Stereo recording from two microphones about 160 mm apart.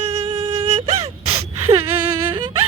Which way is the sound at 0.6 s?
40° right (ahead or behind).